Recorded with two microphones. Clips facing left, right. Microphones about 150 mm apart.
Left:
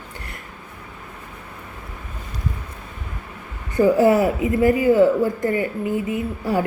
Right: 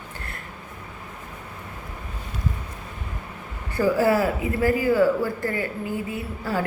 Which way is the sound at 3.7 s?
20° left (ahead or behind).